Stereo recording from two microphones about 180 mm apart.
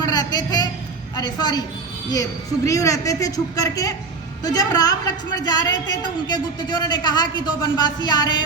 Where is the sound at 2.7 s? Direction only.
20° left (ahead or behind).